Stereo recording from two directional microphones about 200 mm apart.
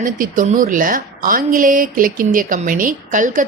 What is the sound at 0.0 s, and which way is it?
Speech, 40° right (ahead or behind).